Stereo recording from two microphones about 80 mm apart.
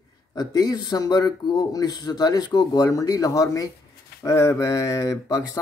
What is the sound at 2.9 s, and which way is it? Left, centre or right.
Speech, left.